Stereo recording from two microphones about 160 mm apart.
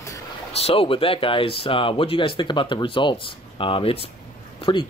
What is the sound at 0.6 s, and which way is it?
Speech, 35° left (ahead or behind).